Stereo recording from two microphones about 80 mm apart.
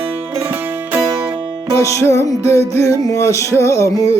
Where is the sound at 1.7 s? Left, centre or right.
Left.